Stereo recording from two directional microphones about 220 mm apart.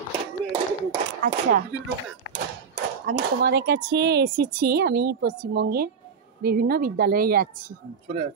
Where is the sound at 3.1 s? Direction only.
45° right (ahead or behind).